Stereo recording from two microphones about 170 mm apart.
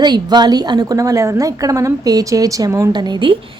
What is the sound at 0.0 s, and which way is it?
A woman's voice, 25° right (ahead or behind).